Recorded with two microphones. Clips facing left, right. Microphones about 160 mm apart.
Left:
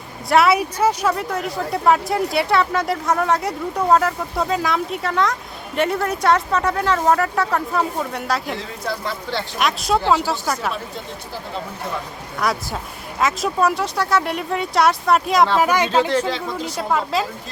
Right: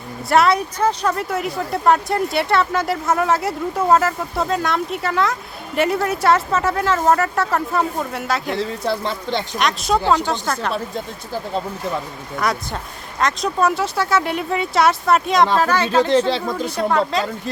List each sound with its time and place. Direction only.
0.3 s speech: 5° left (ahead or behind)
1.1 s speech: 5° right (ahead or behind)
8.5 s speech: 30° right (ahead or behind)
9.6 s speech: centre (ahead or behind)
12.4 s speech: centre (ahead or behind)
15.5 s speech: 15° left (ahead or behind)
16.0 s speech: 30° right (ahead or behind)
17.1 s speech: 5° left (ahead or behind)